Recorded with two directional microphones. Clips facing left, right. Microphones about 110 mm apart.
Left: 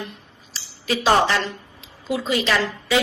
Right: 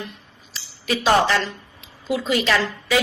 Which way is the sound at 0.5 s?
25° left (ahead or behind).